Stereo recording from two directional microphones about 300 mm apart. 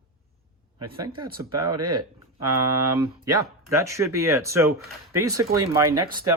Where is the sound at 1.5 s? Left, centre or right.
Right.